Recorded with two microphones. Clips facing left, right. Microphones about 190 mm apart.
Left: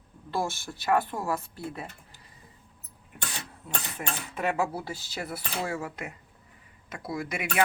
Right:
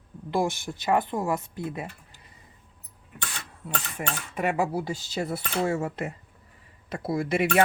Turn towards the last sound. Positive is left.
turn(degrees=-30)  # may be behind; listen again after turning